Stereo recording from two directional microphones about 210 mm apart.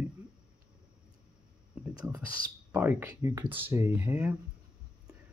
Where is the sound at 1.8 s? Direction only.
10° right (ahead or behind).